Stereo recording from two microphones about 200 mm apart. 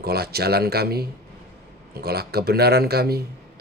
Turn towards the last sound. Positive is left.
turn(degrees=-50)  # may be behind; listen again after turning